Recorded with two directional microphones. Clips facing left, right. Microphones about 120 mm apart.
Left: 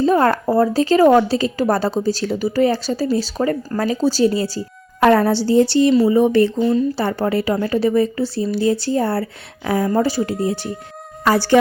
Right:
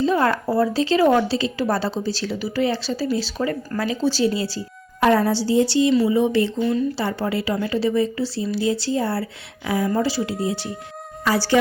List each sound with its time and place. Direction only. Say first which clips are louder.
0.0 s a woman's voice: left 4 dB; 45° left (ahead or behind)
4.9 s a woman's voice: left 4 dB; 60° left (ahead or behind)
5.9 s a woman's voice: left 4 dB; 40° left (ahead or behind)